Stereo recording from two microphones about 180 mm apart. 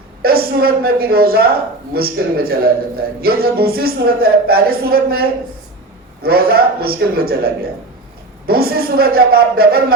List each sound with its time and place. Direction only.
0.2 s a woman's voice: 60° right (ahead or behind)